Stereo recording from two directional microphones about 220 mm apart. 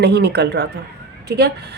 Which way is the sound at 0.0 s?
50° right (ahead or behind).